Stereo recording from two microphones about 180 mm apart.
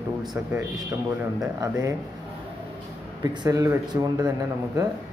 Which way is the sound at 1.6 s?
15° right (ahead or behind).